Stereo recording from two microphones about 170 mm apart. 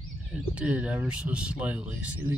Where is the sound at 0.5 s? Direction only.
10° right (ahead or behind).